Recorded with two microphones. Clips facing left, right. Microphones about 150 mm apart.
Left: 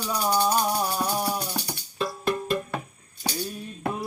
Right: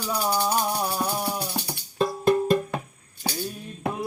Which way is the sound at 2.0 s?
45° right (ahead or behind).